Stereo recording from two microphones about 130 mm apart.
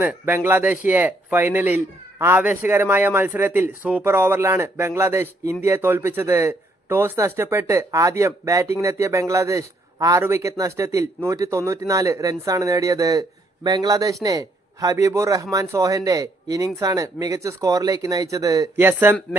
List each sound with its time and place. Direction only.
0.0 s speech: 15° right (ahead or behind)